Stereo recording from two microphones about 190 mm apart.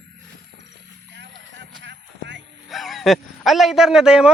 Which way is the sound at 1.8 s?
70° right (ahead or behind).